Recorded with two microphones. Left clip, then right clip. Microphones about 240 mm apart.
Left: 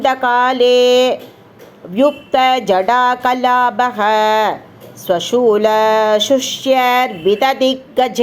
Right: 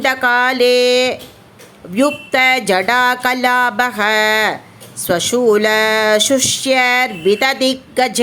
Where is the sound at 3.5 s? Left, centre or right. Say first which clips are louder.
Left 1 dB; right.